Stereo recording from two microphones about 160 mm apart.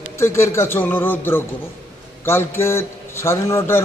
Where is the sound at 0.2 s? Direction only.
15° left (ahead or behind).